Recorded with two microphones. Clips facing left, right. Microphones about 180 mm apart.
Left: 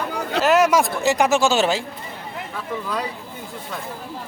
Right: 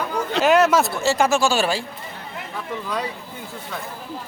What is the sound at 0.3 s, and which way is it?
Speech, 5° left (ahead or behind).